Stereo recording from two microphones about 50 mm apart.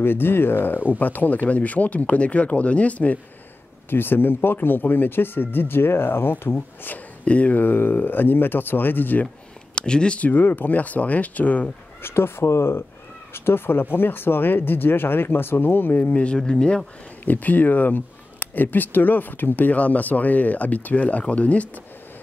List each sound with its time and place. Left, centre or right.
0.0 s speech: left
3.9 s speech: left
7.2 s speech: left
7.6 s speech: left
9.8 s speech: centre
10.4 s speech: left
12.0 s speech: left
16.1 s speech: left
17.2 s speech: left